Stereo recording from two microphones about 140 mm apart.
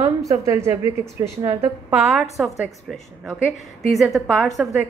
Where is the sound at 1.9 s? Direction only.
5° right (ahead or behind).